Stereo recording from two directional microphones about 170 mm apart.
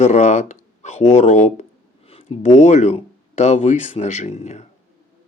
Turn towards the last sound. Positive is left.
turn(degrees=40)  # may be behind; listen again after turning